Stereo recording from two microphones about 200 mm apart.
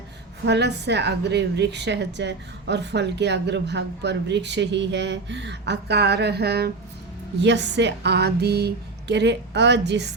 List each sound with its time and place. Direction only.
0.4 s a woman's voice: 60° right (ahead or behind)